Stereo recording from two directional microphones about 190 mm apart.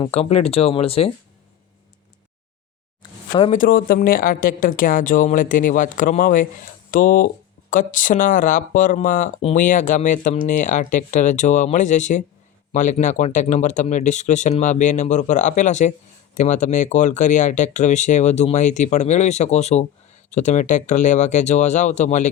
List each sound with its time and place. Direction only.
0.0 s speech: 35° left (ahead or behind)
3.0 s a sound: 25° left (ahead or behind)
3.5 s speech: 45° left (ahead or behind)